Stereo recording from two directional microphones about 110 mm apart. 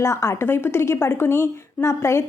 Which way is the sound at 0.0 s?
25° left (ahead or behind).